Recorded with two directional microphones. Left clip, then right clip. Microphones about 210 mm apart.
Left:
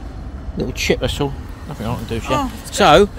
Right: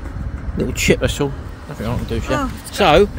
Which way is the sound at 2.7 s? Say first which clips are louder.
Left 2 dB; 15° left (ahead or behind).